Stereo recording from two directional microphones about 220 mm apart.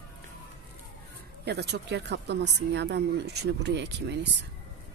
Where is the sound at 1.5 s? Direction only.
50° right (ahead or behind).